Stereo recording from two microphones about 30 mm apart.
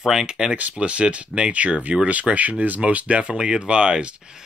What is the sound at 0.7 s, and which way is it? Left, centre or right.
Speech, right.